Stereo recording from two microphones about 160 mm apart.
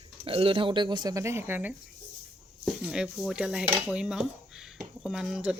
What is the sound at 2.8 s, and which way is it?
Speech, 5° right (ahead or behind).